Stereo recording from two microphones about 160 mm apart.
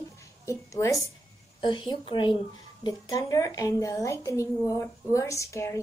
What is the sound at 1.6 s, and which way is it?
A woman's voice, 30° left (ahead or behind).